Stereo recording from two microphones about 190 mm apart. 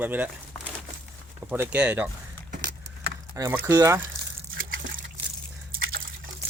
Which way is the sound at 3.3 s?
15° right (ahead or behind).